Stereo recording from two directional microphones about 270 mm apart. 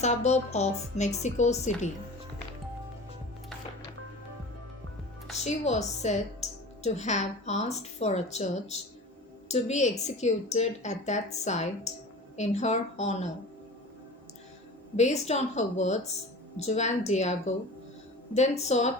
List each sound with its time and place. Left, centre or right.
0.0 s a woman's voice: left
5.4 s a woman's voice: left
14.9 s a woman's voice: left